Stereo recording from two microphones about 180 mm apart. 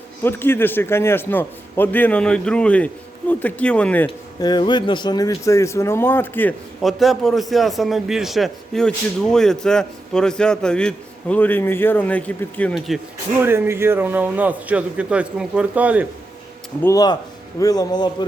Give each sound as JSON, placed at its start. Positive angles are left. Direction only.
{"t": 0.2, "sound": "a man's voice", "side_deg": 10}
{"t": 4.4, "sound": "a man's voice", "side_deg": 25}
{"t": 6.8, "sound": "a man's voice", "side_deg": 0}
{"t": 13.4, "sound": "a man's voice", "side_deg": -15}
{"t": 16.8, "sound": "a man's voice", "side_deg": 20}